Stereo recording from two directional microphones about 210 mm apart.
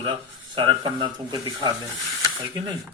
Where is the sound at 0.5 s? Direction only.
25° right (ahead or behind).